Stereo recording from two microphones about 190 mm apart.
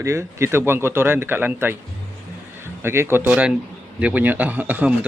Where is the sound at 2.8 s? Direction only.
10° right (ahead or behind).